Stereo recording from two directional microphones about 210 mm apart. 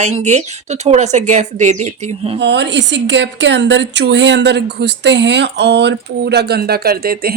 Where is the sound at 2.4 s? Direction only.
55° right (ahead or behind).